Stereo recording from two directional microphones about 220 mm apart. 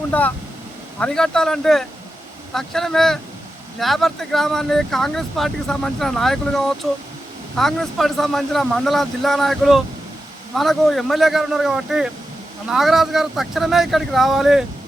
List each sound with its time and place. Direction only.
0.1 s speech: 5° left (ahead or behind)